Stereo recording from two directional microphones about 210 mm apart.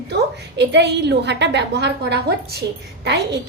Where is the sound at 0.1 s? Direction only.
50° right (ahead or behind).